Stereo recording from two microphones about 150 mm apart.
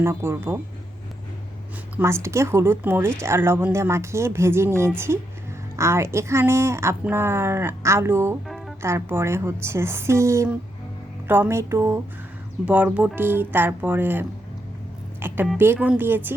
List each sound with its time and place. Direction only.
0.0 s speech: 15° right (ahead or behind)
2.0 s speech: 20° right (ahead or behind)
8.4 s music: centre (ahead or behind)
8.8 s speech: 20° right (ahead or behind)